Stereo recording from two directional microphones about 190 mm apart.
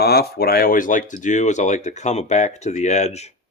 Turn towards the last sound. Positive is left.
turn(degrees=35)  # may be behind; listen again after turning